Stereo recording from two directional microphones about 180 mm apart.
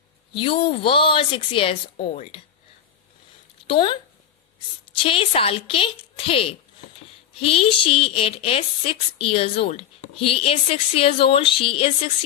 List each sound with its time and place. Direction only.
0.3 s a woman's voice: 30° left (ahead or behind)
3.6 s speech: 30° left (ahead or behind)
4.9 s a woman's voice: 30° left (ahead or behind)